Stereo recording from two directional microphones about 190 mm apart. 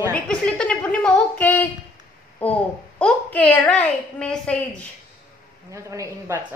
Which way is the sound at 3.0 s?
10° left (ahead or behind).